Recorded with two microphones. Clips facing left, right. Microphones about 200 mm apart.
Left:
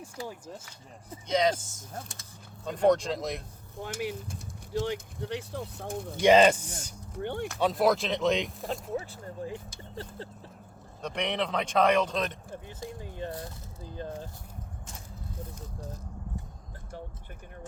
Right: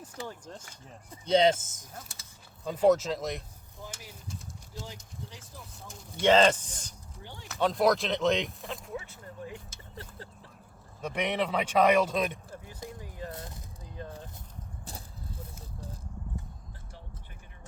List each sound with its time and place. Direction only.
0.0 s speech: 10° left (ahead or behind)
1.3 s speech: 25° right (ahead or behind)
2.6 s speech: 5° right (ahead or behind)
4.0 s speech: 70° left (ahead or behind)
6.2 s speech: 10° left (ahead or behind)
7.2 s speech: 60° left (ahead or behind)
7.4 s speech: centre (ahead or behind)
8.9 s speech: 35° left (ahead or behind)
11.0 s speech: 5° right (ahead or behind)
13.0 s speech: 25° left (ahead or behind)